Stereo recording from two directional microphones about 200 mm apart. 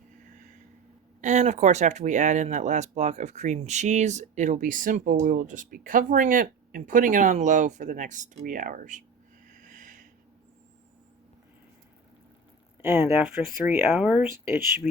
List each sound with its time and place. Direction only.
1.2 s speech: 35° right (ahead or behind)
9.5 s a sound: 40° right (ahead or behind)
12.8 s speech: 10° right (ahead or behind)